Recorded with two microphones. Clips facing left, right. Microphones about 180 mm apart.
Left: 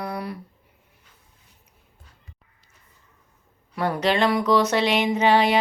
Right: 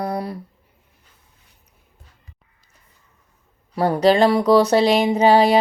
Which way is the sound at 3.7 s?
35° right (ahead or behind).